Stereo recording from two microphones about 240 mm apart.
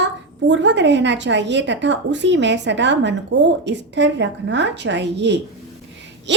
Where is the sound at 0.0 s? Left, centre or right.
Right.